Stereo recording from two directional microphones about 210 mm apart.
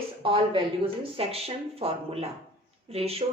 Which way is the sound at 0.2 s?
25° right (ahead or behind).